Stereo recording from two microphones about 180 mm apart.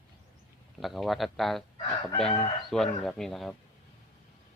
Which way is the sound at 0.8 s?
Centre (ahead or behind).